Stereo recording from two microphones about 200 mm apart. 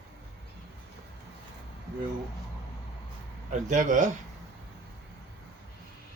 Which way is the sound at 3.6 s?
40° right (ahead or behind).